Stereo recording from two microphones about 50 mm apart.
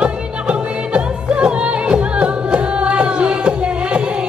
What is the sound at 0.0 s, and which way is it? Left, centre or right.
Music, right.